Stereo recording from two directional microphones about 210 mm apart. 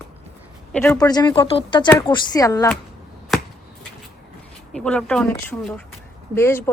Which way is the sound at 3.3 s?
Centre (ahead or behind).